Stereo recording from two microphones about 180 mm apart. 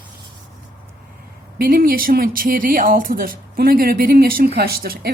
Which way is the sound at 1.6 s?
55° right (ahead or behind).